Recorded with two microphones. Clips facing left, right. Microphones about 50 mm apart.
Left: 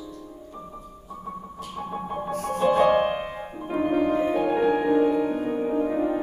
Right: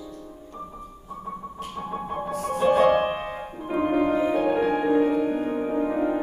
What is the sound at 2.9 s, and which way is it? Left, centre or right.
Music, centre.